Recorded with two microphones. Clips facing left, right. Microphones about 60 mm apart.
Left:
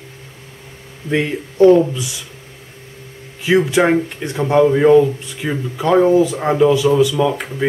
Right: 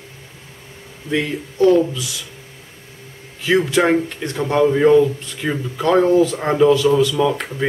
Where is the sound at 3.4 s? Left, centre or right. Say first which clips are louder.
Left 2 dB; centre.